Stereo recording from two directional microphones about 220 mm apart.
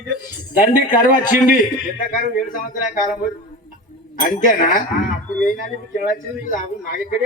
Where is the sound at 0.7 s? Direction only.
35° left (ahead or behind).